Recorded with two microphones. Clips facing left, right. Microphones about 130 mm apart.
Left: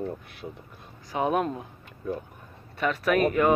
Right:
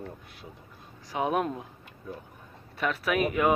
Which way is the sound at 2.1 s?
65° left (ahead or behind).